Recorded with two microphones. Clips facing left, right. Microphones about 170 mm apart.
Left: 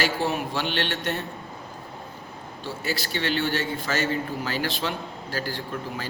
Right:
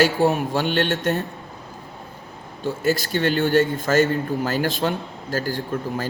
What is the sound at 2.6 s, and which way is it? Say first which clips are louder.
Speech: right 9 dB; 45° right (ahead or behind).